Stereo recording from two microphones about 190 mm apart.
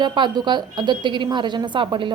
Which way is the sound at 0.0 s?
20° right (ahead or behind).